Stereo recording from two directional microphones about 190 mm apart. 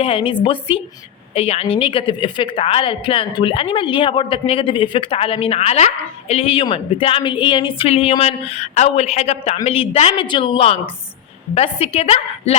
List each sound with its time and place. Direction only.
0.0 s a woman's voice: 30° left (ahead or behind)